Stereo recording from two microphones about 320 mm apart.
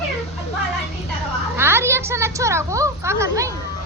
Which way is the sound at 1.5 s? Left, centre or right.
Centre.